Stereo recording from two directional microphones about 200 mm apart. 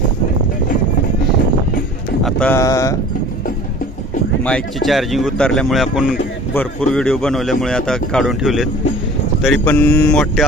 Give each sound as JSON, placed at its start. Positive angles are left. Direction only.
{"t": 2.2, "sound": "speech", "side_deg": 5}
{"t": 2.6, "sound": "mantra", "side_deg": 15}
{"t": 4.5, "sound": "speech", "side_deg": 0}
{"t": 9.4, "sound": "mantra", "side_deg": 5}